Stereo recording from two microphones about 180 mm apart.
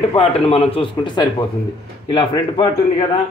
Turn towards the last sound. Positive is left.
turn(degrees=25)  # may be behind; listen again after turning